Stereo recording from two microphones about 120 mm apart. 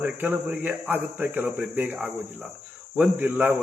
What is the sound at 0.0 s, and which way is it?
Speech, 15° right (ahead or behind).